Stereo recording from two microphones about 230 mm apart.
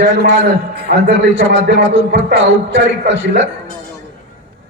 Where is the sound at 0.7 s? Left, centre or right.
Right.